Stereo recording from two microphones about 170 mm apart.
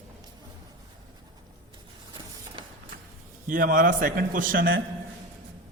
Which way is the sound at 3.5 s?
55° right (ahead or behind).